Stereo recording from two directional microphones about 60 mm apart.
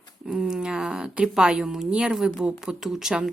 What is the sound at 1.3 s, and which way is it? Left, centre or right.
Speech, centre.